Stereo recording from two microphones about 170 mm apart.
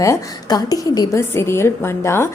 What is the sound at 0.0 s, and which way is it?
A woman's voice, 20° left (ahead or behind).